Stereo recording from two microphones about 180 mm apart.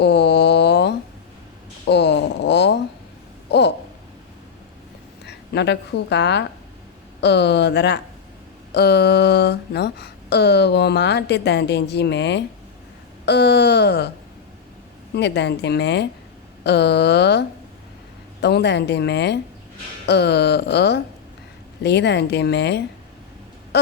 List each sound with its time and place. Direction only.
0.0 s a sound: 70° left (ahead or behind)
5.2 s a woman's voice: 70° left (ahead or behind)
15.1 s speech: 70° left (ahead or behind)
18.4 s speech: 70° left (ahead or behind)